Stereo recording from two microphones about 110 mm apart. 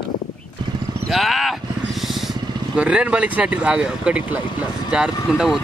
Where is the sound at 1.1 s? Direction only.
Centre (ahead or behind).